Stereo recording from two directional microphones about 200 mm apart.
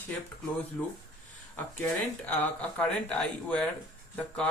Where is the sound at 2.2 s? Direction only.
5° left (ahead or behind).